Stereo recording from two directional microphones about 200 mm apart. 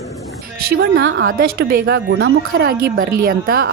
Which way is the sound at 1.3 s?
45° right (ahead or behind).